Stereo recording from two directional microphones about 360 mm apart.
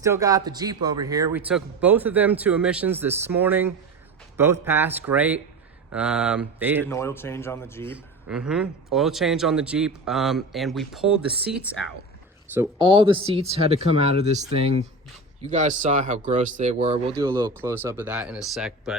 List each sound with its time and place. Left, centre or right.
0.0 s a man's voice: centre
6.9 s a man's voice: centre
12.5 s speech: centre